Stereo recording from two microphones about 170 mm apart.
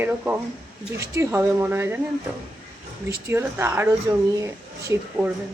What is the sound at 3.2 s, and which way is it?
A woman's voice, 15° right (ahead or behind).